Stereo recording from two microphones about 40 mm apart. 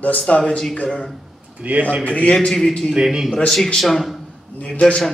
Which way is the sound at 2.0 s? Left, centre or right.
Left.